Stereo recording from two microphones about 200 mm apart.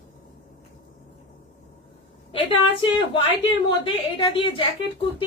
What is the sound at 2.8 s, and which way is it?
A woman's voice, 25° left (ahead or behind).